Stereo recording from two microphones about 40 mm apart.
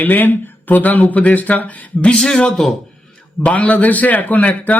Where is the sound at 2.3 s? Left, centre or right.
Left.